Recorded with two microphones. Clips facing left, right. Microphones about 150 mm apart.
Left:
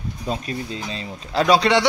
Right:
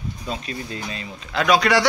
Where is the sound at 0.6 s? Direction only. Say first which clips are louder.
Left 2 dB; 25° left (ahead or behind).